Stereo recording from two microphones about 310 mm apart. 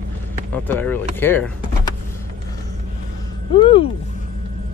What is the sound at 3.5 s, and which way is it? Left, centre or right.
Speech, centre.